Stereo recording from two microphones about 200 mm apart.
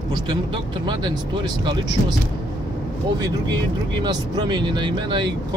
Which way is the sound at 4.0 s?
20° right (ahead or behind).